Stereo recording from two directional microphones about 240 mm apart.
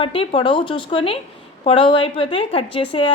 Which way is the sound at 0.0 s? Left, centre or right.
Left.